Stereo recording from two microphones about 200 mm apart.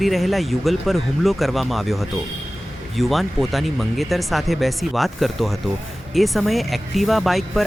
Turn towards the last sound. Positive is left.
turn(degrees=0)  # may be behind; listen again after turning